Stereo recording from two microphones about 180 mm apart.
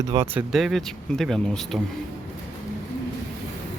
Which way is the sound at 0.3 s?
Centre (ahead or behind).